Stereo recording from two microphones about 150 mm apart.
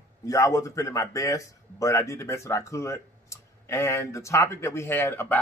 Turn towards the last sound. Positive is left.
turn(degrees=15)  # may be behind; listen again after turning